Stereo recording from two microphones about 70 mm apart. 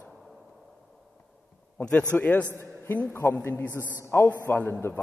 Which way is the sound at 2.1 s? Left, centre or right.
Left.